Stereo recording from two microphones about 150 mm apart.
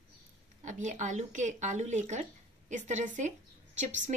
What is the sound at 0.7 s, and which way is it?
A woman's voice, 55° right (ahead or behind).